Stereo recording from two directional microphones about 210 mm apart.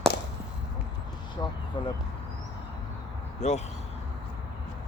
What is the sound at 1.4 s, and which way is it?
Speech, 20° left (ahead or behind).